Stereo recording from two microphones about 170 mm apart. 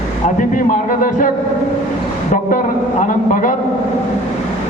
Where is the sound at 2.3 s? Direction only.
50° left (ahead or behind).